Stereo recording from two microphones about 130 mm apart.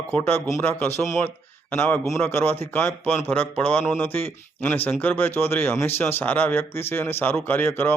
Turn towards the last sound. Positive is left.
turn(degrees=15)  # may be behind; listen again after turning